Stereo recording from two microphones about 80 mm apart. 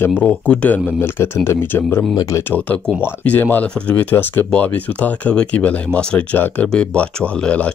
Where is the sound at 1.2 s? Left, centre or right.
Left.